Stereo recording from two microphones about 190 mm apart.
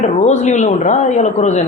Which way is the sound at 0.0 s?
40° left (ahead or behind).